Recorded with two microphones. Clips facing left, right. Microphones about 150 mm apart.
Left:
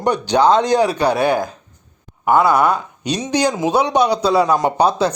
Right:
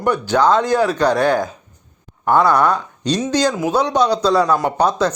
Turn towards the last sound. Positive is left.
turn(degrees=10)  # may be behind; listen again after turning